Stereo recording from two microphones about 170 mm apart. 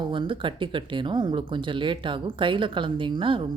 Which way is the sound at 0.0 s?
30° right (ahead or behind).